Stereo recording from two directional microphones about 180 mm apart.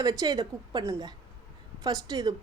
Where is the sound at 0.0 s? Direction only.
20° right (ahead or behind).